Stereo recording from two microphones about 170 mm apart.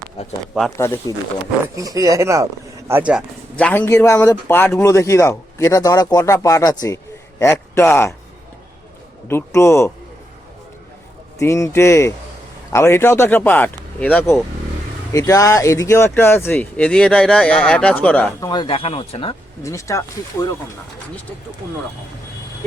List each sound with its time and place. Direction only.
0.2 s speech: 35° left (ahead or behind)
0.8 s speech: 15° left (ahead or behind)
1.7 s speech: 20° right (ahead or behind)
3.5 s speech: 10° left (ahead or behind)
9.2 s speech: 15° left (ahead or behind)
11.3 s speech: 20° left (ahead or behind)
18.3 s speech: 25° left (ahead or behind)
19.6 s speech: 20° left (ahead or behind)